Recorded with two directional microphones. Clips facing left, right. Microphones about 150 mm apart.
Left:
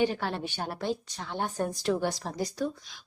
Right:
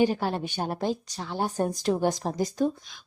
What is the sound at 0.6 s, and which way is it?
Speech, 40° right (ahead or behind).